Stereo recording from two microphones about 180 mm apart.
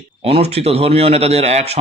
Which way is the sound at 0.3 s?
35° right (ahead or behind).